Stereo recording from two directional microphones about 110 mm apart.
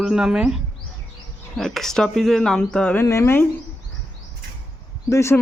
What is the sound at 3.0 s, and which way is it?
Speech, 25° left (ahead or behind).